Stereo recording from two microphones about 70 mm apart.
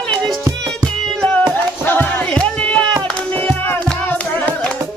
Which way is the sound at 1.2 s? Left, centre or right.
Centre.